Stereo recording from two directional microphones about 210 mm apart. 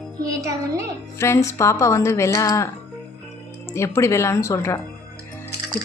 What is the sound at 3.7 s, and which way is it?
A woman's voice, 15° left (ahead or behind).